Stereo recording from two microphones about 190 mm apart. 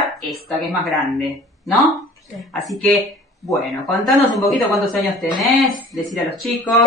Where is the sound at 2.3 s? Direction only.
Centre (ahead or behind).